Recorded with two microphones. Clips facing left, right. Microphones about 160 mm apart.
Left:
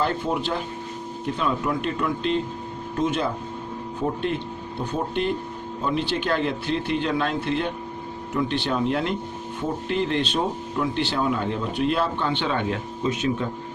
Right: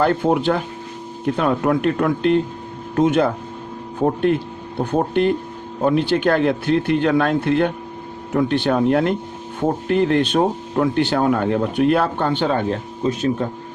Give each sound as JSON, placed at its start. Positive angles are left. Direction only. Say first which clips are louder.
{"t": 0.0, "sound": "a man's voice", "louder": "right 8 dB", "side_deg": -60}